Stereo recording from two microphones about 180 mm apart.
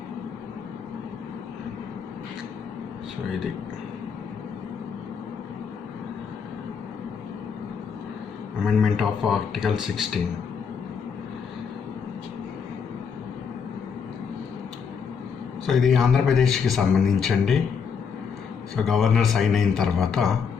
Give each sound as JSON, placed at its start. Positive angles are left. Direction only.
{"t": 8.6, "sound": "speech", "side_deg": 0}
{"t": 15.6, "sound": "speech", "side_deg": 0}
{"t": 18.8, "sound": "speech", "side_deg": 0}